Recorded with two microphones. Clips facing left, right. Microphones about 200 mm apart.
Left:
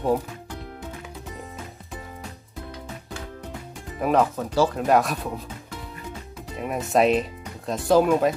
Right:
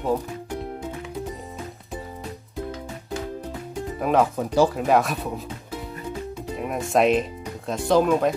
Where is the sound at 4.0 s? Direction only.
Centre (ahead or behind).